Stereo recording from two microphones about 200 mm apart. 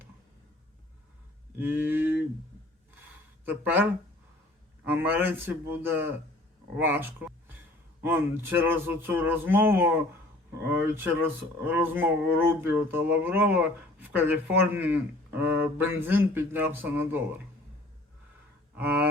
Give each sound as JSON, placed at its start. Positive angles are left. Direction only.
{"t": 1.5, "sound": "a sound", "side_deg": -10}
{"t": 3.4, "sound": "speech", "side_deg": -10}
{"t": 4.9, "sound": "speech", "side_deg": -10}
{"t": 18.8, "sound": "speech", "side_deg": -10}